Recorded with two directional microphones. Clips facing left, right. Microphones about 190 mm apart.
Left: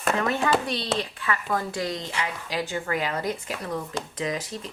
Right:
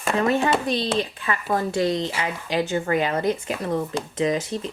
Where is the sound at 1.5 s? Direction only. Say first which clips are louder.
Right 9 dB; 25° right (ahead or behind).